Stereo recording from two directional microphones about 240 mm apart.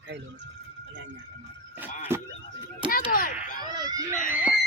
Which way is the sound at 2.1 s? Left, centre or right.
Centre.